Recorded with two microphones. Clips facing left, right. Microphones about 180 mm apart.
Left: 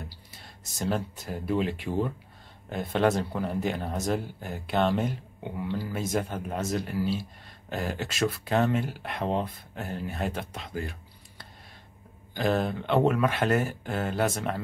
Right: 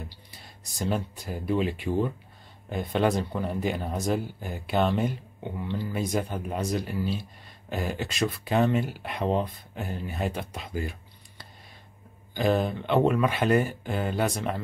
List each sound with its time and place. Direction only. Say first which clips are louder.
0.3 s speech: even; centre (ahead or behind)